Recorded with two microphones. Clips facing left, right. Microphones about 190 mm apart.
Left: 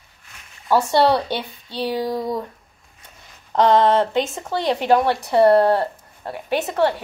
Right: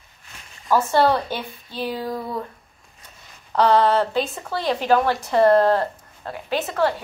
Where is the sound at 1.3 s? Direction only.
75° left (ahead or behind).